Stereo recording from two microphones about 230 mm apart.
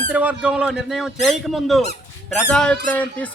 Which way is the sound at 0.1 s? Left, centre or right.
Centre.